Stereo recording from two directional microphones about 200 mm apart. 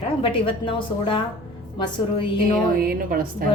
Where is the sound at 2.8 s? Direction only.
45° right (ahead or behind).